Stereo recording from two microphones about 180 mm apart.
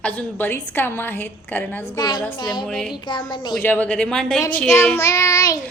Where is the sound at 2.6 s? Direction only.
5° left (ahead or behind).